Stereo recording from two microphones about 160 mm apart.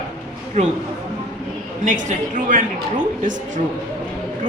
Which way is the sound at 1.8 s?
50° right (ahead or behind).